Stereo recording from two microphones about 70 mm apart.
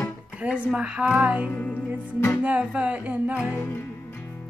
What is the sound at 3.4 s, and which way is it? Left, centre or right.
Music, left.